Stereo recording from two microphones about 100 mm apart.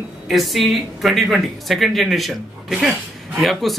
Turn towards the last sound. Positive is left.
turn(degrees=0)  # may be behind; listen again after turning